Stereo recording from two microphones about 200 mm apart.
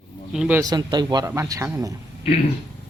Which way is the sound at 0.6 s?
20° right (ahead or behind).